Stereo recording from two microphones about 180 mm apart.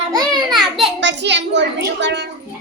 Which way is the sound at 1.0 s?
75° right (ahead or behind).